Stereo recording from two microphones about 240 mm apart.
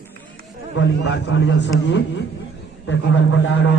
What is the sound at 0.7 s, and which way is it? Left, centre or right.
A man's voice, left.